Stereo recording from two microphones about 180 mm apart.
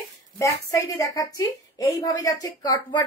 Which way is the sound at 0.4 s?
15° left (ahead or behind).